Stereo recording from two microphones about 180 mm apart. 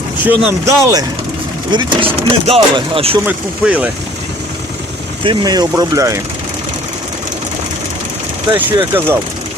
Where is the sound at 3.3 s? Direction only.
5° right (ahead or behind).